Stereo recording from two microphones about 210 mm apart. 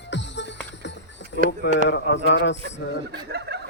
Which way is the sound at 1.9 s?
60° left (ahead or behind).